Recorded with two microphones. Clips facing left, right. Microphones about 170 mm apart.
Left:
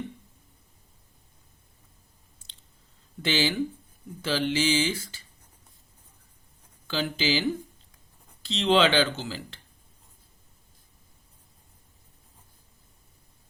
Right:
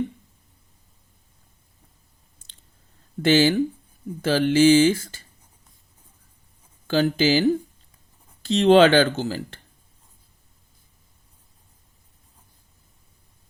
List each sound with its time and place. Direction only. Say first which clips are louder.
3.2 s speech: right 9 dB; 50° right (ahead or behind)
6.8 s speech: right 8 dB; 50° right (ahead or behind)